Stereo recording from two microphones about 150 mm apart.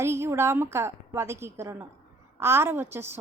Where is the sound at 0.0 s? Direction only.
15° right (ahead or behind).